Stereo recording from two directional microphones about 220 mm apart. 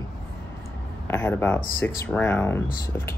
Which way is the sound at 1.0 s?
10° left (ahead or behind).